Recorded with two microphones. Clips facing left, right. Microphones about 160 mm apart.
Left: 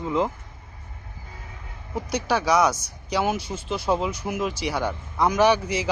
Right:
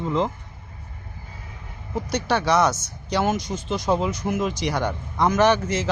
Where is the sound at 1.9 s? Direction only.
5° left (ahead or behind).